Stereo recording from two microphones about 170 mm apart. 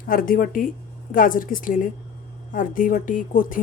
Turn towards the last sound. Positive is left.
turn(degrees=55)  # may be behind; listen again after turning